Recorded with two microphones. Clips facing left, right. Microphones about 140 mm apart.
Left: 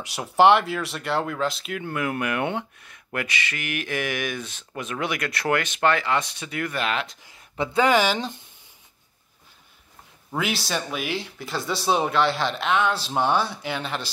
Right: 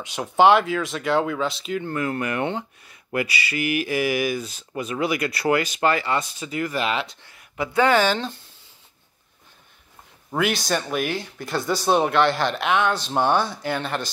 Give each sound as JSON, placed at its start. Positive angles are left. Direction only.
{"t": 0.0, "sound": "speech", "side_deg": 5}
{"t": 7.5, "sound": "speech", "side_deg": 30}
{"t": 7.8, "sound": "speech", "side_deg": 15}
{"t": 10.3, "sound": "speech", "side_deg": 0}